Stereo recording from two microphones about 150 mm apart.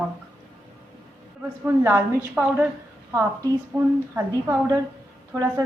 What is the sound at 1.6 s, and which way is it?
A woman's voice, 15° right (ahead or behind).